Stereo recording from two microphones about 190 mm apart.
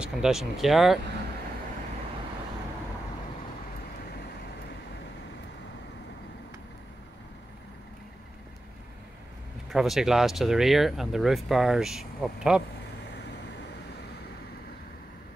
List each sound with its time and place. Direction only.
0.0 s speech: 5° right (ahead or behind)
9.7 s speech: centre (ahead or behind)